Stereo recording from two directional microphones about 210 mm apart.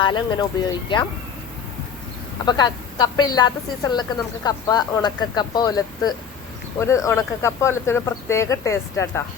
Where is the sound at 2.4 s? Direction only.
20° left (ahead or behind).